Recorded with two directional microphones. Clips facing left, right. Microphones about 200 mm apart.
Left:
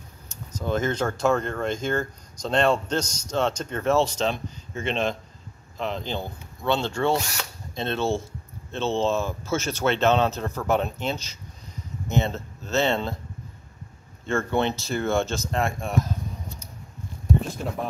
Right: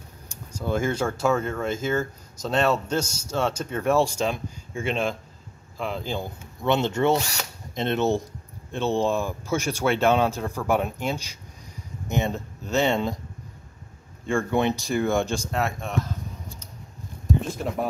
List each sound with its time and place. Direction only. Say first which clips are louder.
0.5 s speech: even; 10° right (ahead or behind)
6.6 s speech: right 2 dB; 20° right (ahead or behind)
14.2 s speech: right 1 dB; 15° right (ahead or behind)